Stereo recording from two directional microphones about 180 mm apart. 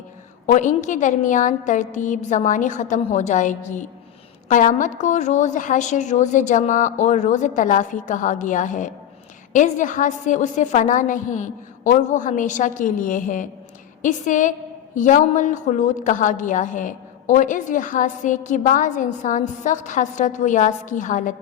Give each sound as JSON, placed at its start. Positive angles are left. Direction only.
{"t": 0.4, "sound": "a woman's voice", "side_deg": 45}